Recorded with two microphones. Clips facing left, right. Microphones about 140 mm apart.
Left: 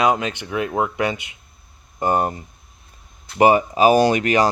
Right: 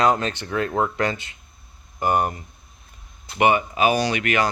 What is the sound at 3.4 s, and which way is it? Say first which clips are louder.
Speech: left 4 dB; 35° left (ahead or behind).